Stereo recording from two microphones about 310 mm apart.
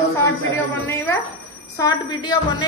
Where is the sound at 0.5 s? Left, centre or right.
Centre.